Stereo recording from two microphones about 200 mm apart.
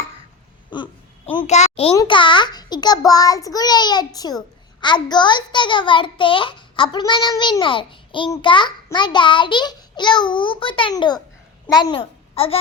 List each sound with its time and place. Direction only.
0.7 s a child's voice: 20° left (ahead or behind)
1.5 s a child's voice: 35° left (ahead or behind)